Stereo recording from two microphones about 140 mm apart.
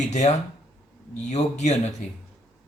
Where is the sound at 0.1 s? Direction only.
55° left (ahead or behind).